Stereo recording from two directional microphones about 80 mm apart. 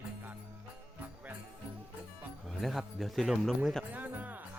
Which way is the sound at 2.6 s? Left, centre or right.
Centre.